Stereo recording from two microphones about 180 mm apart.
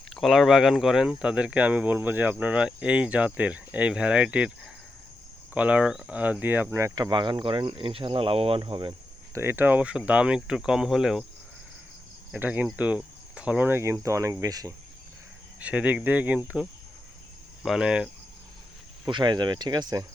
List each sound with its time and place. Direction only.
0.1 s speech: centre (ahead or behind)
12.3 s speech: 10° right (ahead or behind)
15.6 s speech: 5° right (ahead or behind)
19.0 s speech: 25° right (ahead or behind)